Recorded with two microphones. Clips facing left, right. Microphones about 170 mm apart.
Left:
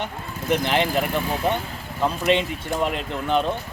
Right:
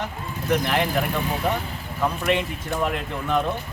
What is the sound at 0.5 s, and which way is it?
Speech, 20° left (ahead or behind).